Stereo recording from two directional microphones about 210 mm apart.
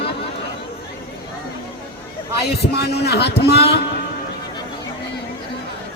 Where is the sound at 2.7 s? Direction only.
50° left (ahead or behind).